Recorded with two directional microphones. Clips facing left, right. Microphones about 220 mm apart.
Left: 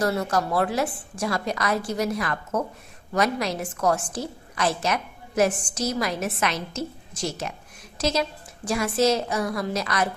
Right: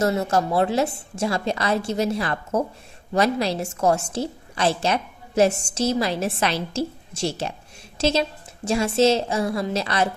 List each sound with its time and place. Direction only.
0.0 s a woman's voice: 25° right (ahead or behind)